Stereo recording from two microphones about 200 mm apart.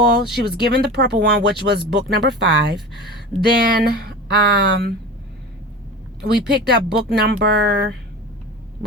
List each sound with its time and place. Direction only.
0.1 s speech: 55° right (ahead or behind)
3.4 s speech: 55° right (ahead or behind)
6.2 s speech: 55° right (ahead or behind)